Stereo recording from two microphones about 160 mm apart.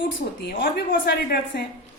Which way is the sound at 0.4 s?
80° left.